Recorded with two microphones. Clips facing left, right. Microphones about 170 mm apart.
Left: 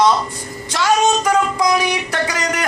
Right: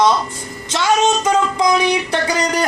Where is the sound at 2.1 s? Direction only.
30° right (ahead or behind).